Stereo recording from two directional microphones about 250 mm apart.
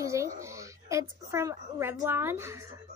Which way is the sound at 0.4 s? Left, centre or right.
Centre.